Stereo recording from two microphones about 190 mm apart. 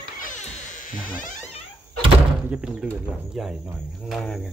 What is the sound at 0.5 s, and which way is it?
Music, 40° left (ahead or behind).